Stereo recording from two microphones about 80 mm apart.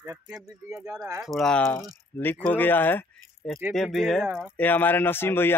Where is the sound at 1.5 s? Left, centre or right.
Centre.